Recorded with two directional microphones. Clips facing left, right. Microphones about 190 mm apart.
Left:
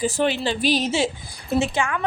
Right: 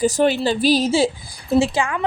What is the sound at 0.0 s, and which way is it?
A woman's voice, 40° right (ahead or behind).